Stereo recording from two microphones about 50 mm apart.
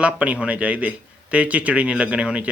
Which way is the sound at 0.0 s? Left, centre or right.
Right.